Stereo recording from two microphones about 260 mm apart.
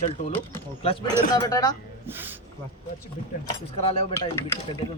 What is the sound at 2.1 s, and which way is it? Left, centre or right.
Speech, centre.